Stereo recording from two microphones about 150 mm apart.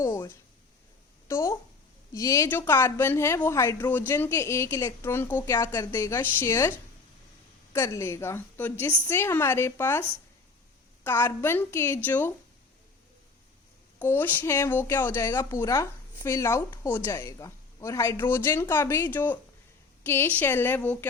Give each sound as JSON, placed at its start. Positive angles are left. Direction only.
{"t": 0.0, "sound": "a woman's voice", "side_deg": 20}
{"t": 14.0, "sound": "a woman's voice", "side_deg": 10}